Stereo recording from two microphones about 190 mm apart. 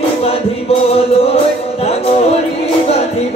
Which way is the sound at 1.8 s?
35° left (ahead or behind).